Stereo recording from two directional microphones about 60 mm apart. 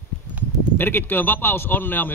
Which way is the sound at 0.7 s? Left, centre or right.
Left.